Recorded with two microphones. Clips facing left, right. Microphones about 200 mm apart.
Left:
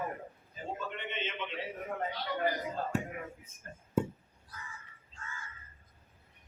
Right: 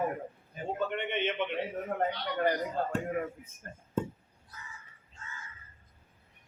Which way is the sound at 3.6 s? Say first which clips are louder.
Right 2 dB; 50° right (ahead or behind).